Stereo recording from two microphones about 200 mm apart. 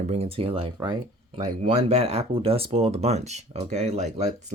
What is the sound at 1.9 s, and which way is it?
Speech, 30° right (ahead or behind).